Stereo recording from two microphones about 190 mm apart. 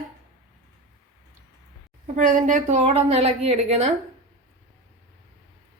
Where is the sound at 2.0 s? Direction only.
40° right (ahead or behind).